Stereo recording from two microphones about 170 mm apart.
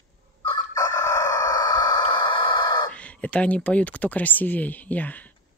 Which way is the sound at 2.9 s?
10° left (ahead or behind).